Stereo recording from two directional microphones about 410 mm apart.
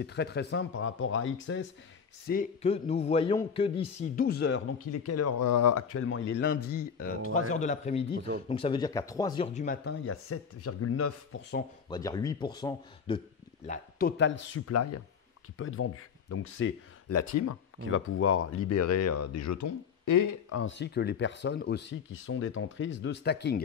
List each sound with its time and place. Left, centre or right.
0.0 s speech: left
11.9 s speech: centre
13.7 s speech: left